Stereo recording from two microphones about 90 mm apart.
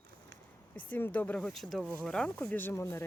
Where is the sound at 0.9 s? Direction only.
20° left (ahead or behind).